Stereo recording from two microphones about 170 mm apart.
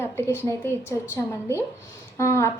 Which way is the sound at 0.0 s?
15° left (ahead or behind).